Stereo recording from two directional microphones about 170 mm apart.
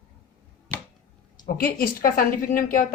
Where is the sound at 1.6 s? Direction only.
60° left (ahead or behind).